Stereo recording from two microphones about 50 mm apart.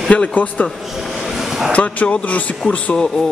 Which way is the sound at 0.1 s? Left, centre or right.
Left.